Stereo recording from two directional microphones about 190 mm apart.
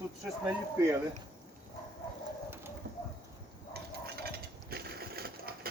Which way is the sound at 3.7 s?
55° right (ahead or behind).